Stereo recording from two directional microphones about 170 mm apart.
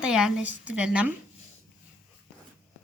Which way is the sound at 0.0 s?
5° right (ahead or behind).